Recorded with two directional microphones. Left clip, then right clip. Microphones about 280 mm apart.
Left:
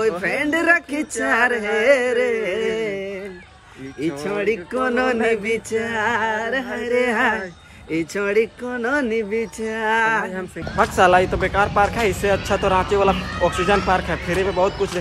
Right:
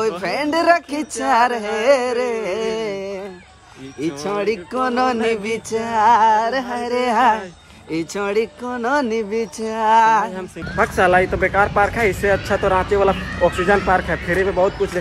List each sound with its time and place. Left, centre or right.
0.2 s speech: centre
10.3 s speech: centre